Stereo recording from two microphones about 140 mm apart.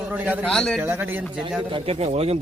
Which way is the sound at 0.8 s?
15° right (ahead or behind).